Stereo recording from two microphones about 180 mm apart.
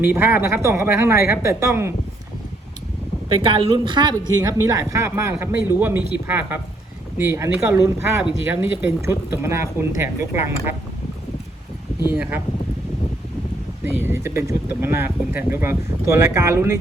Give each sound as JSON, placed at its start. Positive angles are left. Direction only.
{"t": 0.0, "sound": "speech", "side_deg": -10}
{"t": 3.4, "sound": "speech", "side_deg": -30}
{"t": 12.1, "sound": "speech", "side_deg": -5}
{"t": 13.8, "sound": "speech", "side_deg": -10}